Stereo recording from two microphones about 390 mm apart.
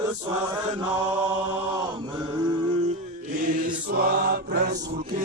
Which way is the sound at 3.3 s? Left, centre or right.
Centre.